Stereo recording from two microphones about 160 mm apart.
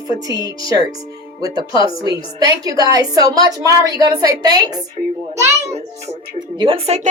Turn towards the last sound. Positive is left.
turn(degrees=-40)  # may be behind; listen again after turning